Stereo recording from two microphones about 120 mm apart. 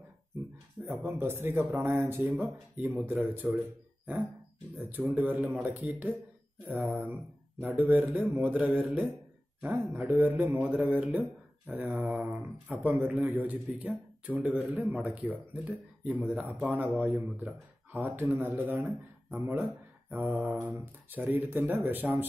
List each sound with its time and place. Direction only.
0.8 s a man's voice: 20° right (ahead or behind)
20.1 s speech: 15° right (ahead or behind)